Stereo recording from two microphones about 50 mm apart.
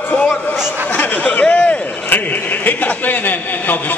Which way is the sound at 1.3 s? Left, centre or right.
Left.